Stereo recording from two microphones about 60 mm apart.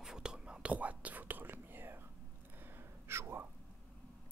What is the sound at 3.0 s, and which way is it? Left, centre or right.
Speech, right.